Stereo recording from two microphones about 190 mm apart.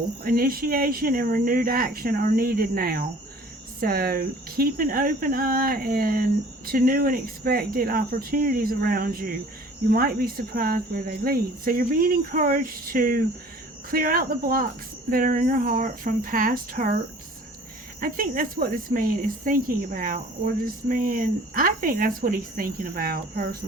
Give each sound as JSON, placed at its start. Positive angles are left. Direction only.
{"t": 0.3, "sound": "speech", "side_deg": -50}
{"t": 18.0, "sound": "speech", "side_deg": -45}